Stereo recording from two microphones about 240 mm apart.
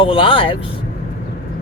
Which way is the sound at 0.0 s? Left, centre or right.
Left.